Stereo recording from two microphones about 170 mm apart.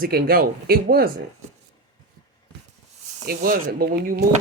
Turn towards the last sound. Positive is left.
turn(degrees=-65)  # may be behind; listen again after turning